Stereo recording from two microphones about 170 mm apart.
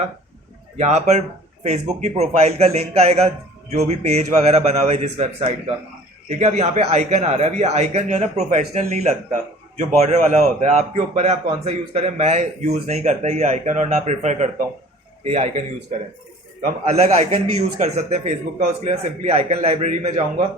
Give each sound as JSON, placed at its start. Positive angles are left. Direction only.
{"t": 0.8, "sound": "a man's voice", "side_deg": -40}
{"t": 16.9, "sound": "a man's voice", "side_deg": -40}